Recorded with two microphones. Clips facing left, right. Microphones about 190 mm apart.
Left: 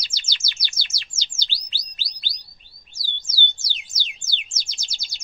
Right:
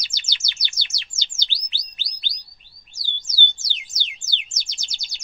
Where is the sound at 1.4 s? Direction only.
15° right (ahead or behind).